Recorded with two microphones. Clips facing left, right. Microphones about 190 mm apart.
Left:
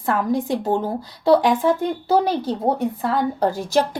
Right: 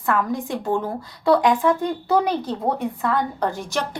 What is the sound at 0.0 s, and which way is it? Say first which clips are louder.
A woman's voice: left 2 dB; 30° left (ahead or behind).